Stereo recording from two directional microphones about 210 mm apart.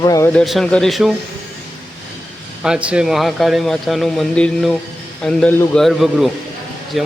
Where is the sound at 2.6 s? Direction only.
5° right (ahead or behind).